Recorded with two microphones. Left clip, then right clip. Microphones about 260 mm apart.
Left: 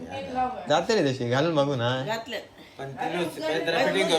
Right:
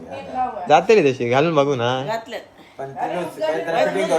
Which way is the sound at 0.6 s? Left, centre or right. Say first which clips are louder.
Right 11 dB; right.